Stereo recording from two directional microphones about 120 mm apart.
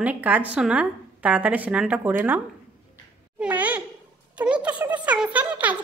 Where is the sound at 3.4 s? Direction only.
10° right (ahead or behind).